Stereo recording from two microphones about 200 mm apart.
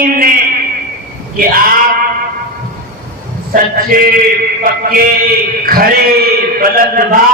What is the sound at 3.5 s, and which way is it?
Speech, 45° right (ahead or behind).